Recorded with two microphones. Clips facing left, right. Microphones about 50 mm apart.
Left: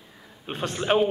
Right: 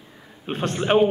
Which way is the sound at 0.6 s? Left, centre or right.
Centre.